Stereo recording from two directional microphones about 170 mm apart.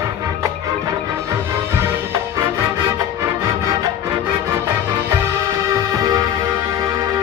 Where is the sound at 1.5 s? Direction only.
15° right (ahead or behind).